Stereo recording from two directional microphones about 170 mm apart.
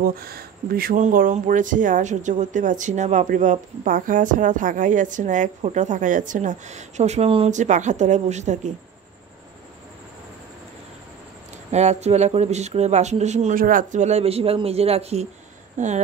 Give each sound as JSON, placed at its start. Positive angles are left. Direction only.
{"t": 0.0, "sound": "speech", "side_deg": -65}
{"t": 11.7, "sound": "speech", "side_deg": -40}